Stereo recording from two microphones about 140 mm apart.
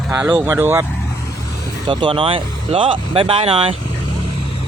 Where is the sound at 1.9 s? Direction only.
40° right (ahead or behind).